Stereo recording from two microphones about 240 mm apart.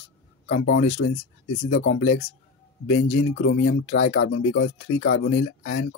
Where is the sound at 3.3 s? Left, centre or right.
Left.